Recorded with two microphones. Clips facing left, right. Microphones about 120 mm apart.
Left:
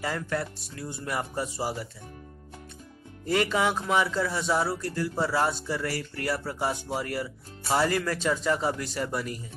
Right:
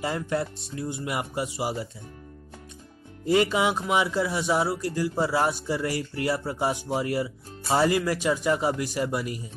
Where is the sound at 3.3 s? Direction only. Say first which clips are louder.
Right 3 dB; 20° right (ahead or behind).